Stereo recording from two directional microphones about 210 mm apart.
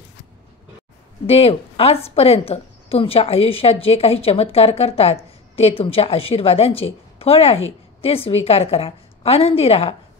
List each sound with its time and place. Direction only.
1.2 s a woman's voice: 30° left (ahead or behind)